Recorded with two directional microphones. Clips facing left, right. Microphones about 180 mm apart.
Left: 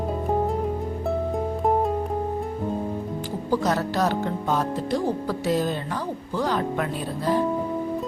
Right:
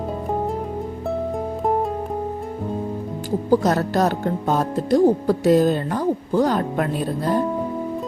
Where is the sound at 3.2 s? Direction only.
45° right (ahead or behind).